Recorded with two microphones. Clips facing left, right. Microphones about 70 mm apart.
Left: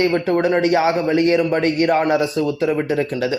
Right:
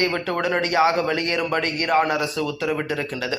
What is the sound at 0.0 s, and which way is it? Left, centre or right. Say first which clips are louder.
Speech: left 6 dB; left.